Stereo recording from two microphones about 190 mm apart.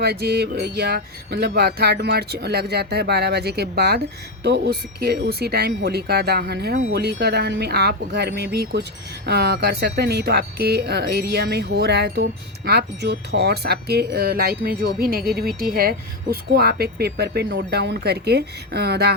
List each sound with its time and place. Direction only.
0.0 s speech: 55° right (ahead or behind)